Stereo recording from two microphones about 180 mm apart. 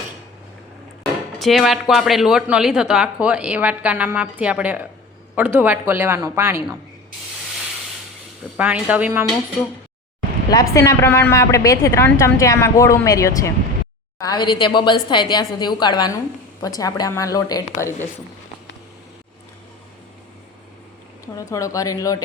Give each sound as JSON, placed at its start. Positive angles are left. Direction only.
{"t": 1.4, "sound": "a woman's voice", "side_deg": 0}
{"t": 8.5, "sound": "a woman's voice", "side_deg": -10}
{"t": 10.5, "sound": "a woman's voice", "side_deg": 20}
{"t": 21.3, "sound": "a woman's voice", "side_deg": 20}